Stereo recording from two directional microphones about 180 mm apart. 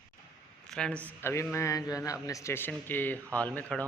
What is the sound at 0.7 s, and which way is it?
Speech, 5° left (ahead or behind).